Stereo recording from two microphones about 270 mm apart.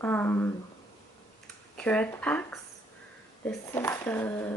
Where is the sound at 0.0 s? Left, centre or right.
Centre.